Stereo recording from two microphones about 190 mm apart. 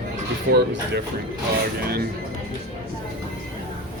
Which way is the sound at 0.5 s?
65° right (ahead or behind).